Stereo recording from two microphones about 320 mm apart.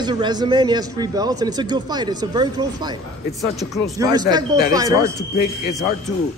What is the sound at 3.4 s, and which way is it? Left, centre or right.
Speech, centre.